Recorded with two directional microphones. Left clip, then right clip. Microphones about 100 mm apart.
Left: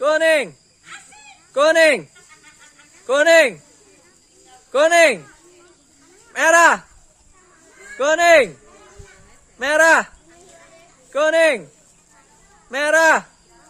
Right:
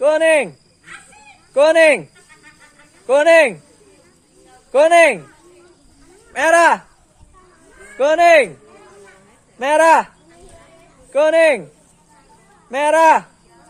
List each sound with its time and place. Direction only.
0.0 s a sound: 25° left (ahead or behind)
1.5 s chicken: 25° left (ahead or behind)
4.4 s a sound: 30° left (ahead or behind)
6.3 s speech: 20° left (ahead or behind)
7.9 s speech: 30° left (ahead or behind)
11.1 s speech: 25° left (ahead or behind)
12.7 s speech: 25° left (ahead or behind)